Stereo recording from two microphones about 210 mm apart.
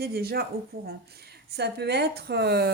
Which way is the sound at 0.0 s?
50° right (ahead or behind).